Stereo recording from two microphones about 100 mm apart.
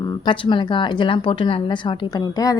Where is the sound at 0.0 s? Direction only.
50° left (ahead or behind).